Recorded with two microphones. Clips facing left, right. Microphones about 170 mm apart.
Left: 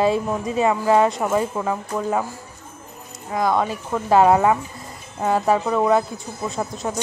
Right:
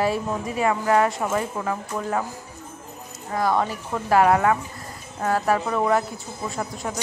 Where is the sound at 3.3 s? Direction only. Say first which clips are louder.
Left 2 dB; 15° left (ahead or behind).